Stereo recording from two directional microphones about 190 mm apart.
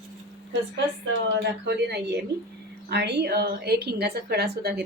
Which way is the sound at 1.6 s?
60° right (ahead or behind).